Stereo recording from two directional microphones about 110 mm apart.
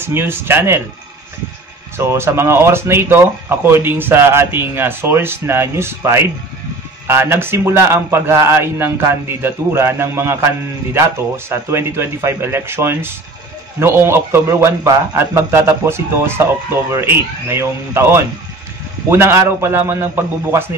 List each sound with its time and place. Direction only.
0.0 s a man's voice: 20° right (ahead or behind)
2.0 s a man's voice: 25° right (ahead or behind)